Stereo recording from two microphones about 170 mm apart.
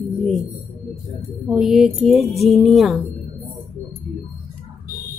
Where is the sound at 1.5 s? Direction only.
Centre (ahead or behind).